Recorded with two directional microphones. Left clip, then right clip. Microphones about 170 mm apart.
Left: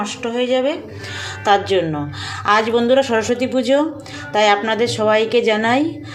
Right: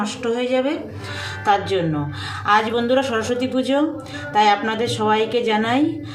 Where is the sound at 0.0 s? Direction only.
40° left (ahead or behind).